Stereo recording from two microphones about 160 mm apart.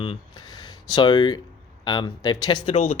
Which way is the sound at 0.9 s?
30° left (ahead or behind).